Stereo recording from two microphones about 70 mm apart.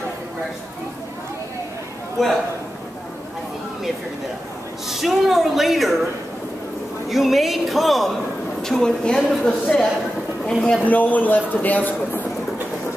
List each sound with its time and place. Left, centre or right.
2.2 s a man's voice: centre
4.8 s a man's voice: centre
7.1 s a man's voice: centre
10.6 s speech: centre